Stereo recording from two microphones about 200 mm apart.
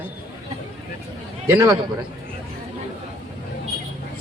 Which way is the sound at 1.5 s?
15° right (ahead or behind).